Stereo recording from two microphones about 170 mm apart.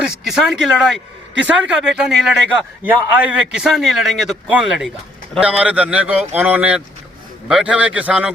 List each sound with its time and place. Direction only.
0.0 s a man's voice: 5° right (ahead or behind)